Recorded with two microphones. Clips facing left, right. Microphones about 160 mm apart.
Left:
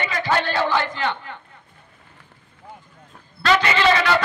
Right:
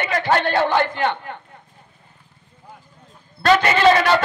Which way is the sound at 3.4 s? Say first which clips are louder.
Right 3 dB; 45° right (ahead or behind).